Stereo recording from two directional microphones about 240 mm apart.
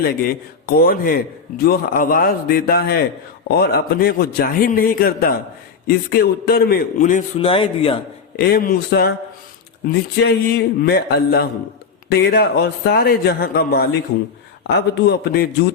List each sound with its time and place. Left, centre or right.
0.2 s a man's voice: left
8.4 s a man's voice: left
10.2 s a man's voice: left